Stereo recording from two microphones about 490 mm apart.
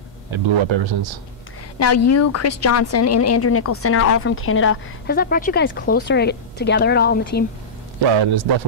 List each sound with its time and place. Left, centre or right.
0.3 s a man's voice: right
1.8 s speech: left
8.1 s a man's voice: right